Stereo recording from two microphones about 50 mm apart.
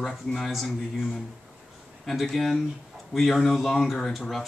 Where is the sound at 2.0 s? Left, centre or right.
Centre.